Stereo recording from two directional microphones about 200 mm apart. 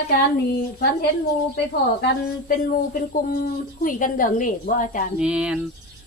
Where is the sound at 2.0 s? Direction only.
45° left (ahead or behind).